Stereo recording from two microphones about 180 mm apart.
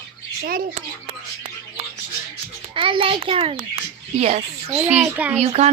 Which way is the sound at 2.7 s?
30° right (ahead or behind).